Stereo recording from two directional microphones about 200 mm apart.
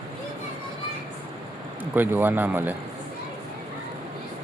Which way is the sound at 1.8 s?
10° right (ahead or behind).